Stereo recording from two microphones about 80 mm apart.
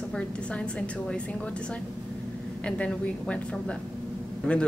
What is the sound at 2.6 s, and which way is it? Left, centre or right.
Speech, centre.